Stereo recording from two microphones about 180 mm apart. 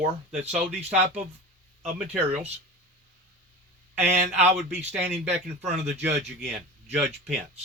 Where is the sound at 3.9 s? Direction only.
40° right (ahead or behind).